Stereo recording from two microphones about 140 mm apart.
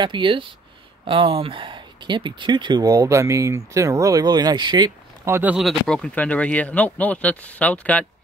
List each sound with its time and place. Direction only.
0.0 s speech: 35° right (ahead or behind)
5.3 s speech: 10° right (ahead or behind)
5.6 s speech: 5° left (ahead or behind)